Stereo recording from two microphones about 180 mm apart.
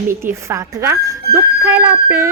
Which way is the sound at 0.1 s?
15° right (ahead or behind).